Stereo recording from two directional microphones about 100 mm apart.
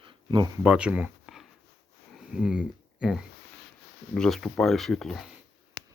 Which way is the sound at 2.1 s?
10° right (ahead or behind).